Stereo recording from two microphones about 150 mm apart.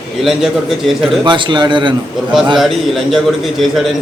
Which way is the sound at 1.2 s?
30° right (ahead or behind).